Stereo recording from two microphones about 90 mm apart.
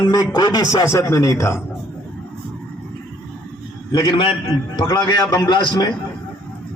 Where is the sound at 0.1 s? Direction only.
50° left (ahead or behind); by 1.6 s 30° left (ahead or behind).